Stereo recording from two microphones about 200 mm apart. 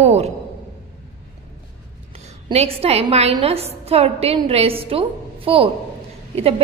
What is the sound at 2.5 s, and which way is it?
A woman's voice, 30° right (ahead or behind).